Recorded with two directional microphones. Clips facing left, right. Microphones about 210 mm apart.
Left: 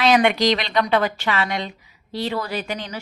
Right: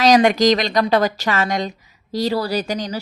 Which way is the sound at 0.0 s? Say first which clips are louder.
Right 4 dB; 40° right (ahead or behind).